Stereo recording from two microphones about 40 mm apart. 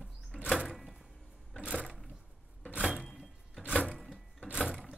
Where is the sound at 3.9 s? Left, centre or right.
Centre.